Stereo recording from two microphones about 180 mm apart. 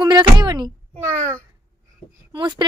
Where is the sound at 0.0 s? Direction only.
25° right (ahead or behind).